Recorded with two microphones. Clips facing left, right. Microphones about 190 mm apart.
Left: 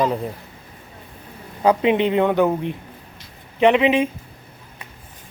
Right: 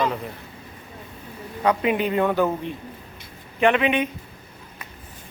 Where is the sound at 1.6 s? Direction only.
25° left (ahead or behind).